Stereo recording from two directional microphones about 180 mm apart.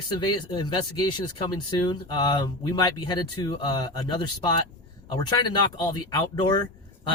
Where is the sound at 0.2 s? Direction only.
25° left (ahead or behind).